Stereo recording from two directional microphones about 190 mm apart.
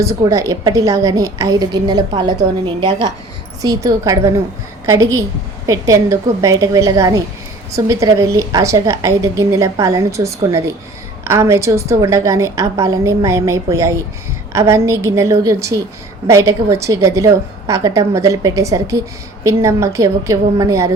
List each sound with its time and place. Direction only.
0.0 s a woman's voice: 15° right (ahead or behind)
5.6 s a woman's voice: 15° right (ahead or behind)